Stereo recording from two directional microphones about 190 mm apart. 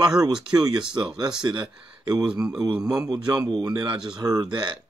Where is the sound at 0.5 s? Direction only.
20° right (ahead or behind).